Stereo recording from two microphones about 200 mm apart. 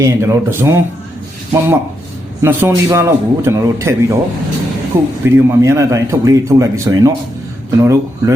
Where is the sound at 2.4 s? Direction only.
10° right (ahead or behind).